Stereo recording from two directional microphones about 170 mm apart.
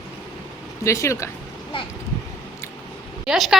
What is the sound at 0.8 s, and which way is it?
Speech, 15° left (ahead or behind).